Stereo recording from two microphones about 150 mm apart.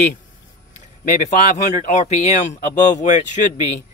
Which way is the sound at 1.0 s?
55° left (ahead or behind).